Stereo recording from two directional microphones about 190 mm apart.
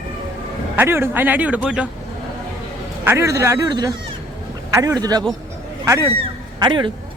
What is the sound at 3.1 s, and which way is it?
Speech, 15° right (ahead or behind).